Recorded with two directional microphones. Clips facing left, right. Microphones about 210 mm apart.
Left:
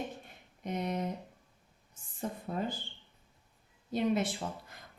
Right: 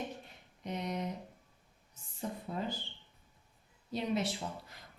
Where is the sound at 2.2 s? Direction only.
50° left (ahead or behind).